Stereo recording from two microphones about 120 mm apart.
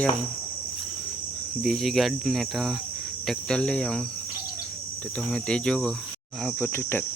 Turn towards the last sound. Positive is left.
turn(degrees=20)  # may be behind; listen again after turning